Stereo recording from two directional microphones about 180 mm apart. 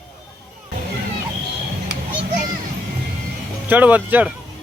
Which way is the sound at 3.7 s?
10° right (ahead or behind).